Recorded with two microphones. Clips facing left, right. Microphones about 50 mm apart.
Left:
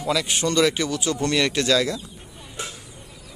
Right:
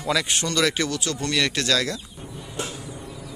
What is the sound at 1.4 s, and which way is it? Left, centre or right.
Speech, centre.